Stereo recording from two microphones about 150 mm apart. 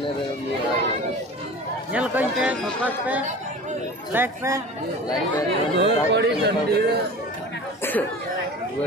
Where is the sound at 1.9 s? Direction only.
10° right (ahead or behind).